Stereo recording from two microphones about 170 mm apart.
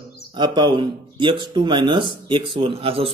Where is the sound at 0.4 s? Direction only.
25° right (ahead or behind).